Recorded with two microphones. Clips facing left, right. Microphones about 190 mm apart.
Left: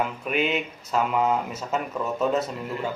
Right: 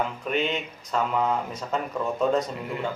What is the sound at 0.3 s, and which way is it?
Speech, 10° left (ahead or behind).